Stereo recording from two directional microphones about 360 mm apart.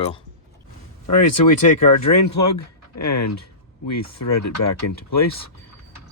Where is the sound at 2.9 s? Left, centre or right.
Left.